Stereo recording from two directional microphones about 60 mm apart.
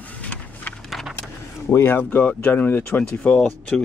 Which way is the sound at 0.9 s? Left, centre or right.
Centre.